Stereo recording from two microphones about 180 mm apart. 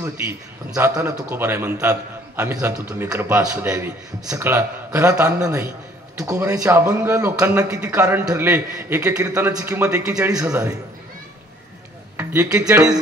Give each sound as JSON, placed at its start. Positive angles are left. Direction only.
{"t": 0.7, "sound": "a man's voice", "side_deg": -15}
{"t": 12.2, "sound": "speech", "side_deg": -10}